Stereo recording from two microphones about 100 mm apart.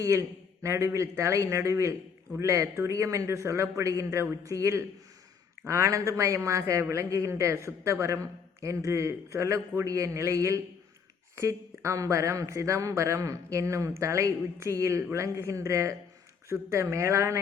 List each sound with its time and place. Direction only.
0.0 s a man's voice: 30° right (ahead or behind)